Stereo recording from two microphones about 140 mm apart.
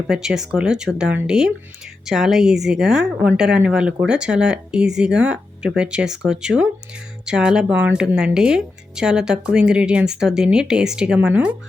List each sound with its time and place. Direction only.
0.1 s speech: 5° right (ahead or behind)